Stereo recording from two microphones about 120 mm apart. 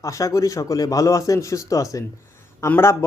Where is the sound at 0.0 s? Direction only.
25° left (ahead or behind).